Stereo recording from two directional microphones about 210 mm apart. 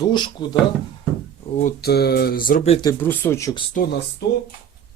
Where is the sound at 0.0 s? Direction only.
20° left (ahead or behind).